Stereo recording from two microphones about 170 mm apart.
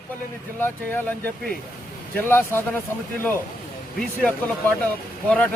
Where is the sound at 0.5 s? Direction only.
10° left (ahead or behind).